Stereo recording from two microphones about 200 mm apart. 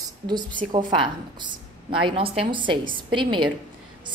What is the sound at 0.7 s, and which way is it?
A woman's voice, 25° right (ahead or behind).